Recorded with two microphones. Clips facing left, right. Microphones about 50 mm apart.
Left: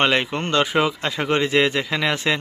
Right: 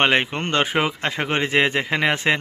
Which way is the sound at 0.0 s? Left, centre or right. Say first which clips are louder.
Right 1 dB; right.